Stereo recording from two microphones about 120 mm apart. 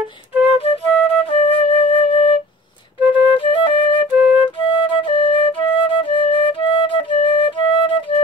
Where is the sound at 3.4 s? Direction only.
45° left (ahead or behind).